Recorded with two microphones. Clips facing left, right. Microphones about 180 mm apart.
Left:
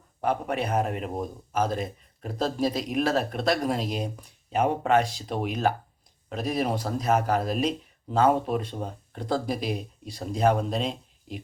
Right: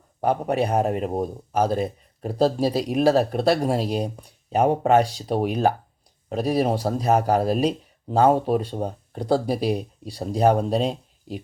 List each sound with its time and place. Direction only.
0.2 s speech: 35° right (ahead or behind)